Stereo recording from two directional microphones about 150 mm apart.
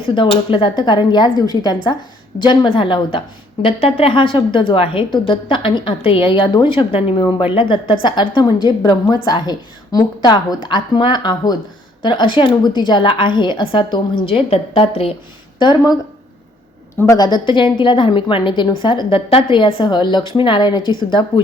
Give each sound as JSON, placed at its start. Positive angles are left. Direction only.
{"t": 0.0, "sound": "a woman's voice", "side_deg": 35}
{"t": 15.5, "sound": "a woman's voice", "side_deg": 30}
{"t": 17.0, "sound": "a woman's voice", "side_deg": 25}